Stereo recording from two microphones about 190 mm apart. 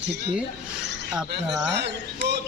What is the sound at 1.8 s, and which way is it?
Speech, 60° right (ahead or behind).